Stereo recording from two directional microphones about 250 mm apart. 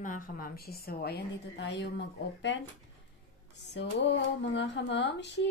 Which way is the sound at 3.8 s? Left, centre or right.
Left.